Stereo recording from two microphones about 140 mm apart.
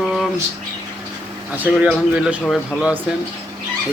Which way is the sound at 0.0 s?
Centre (ahead or behind).